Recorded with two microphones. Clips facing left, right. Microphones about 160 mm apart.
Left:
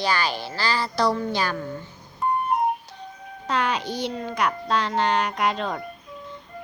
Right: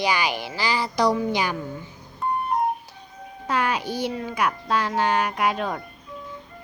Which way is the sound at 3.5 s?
10° right (ahead or behind).